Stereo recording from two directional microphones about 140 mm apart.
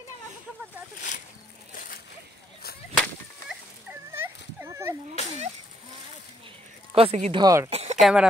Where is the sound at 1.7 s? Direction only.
90° left.